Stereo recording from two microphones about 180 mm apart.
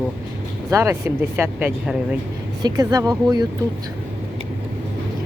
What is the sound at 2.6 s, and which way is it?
Speech, 20° right (ahead or behind).